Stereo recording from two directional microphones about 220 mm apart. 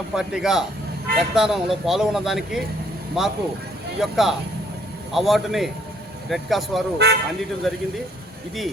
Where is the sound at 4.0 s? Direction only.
Centre (ahead or behind).